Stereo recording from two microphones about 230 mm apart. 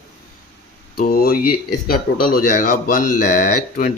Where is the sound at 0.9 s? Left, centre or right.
Left.